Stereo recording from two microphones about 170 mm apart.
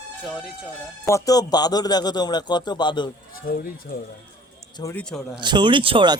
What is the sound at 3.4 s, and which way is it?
Speech, 55° left (ahead or behind).